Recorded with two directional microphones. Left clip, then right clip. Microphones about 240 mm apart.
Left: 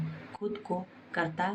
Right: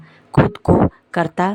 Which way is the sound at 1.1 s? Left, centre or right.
Right.